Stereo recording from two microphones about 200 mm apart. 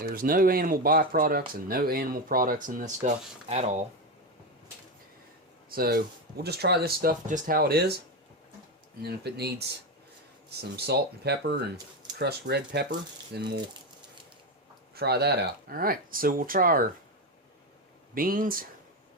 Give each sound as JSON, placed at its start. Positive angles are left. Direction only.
{"t": 0.0, "sound": "speech", "side_deg": -45}
{"t": 5.6, "sound": "speech", "side_deg": -50}
{"t": 9.0, "sound": "speech", "side_deg": -55}
{"t": 14.9, "sound": "speech", "side_deg": -55}
{"t": 18.1, "sound": "speech", "side_deg": -45}